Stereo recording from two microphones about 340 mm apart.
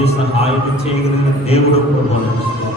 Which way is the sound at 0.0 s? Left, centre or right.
Centre.